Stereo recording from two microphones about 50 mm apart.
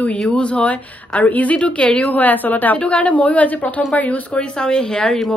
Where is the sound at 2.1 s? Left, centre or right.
Left.